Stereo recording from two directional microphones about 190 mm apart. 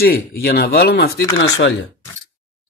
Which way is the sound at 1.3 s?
75° left (ahead or behind).